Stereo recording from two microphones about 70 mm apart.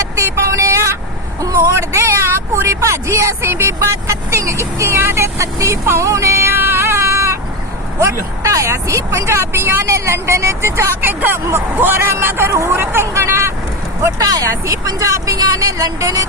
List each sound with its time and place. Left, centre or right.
0.2 s a sound: right
1.4 s vehicle: right
7.9 s speech: right
14.2 s speech: right
14.5 s speech: right